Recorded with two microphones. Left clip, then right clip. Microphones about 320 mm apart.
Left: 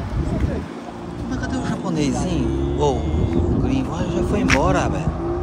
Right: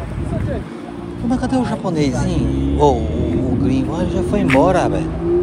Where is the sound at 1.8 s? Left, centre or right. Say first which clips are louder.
Right 3 dB; left.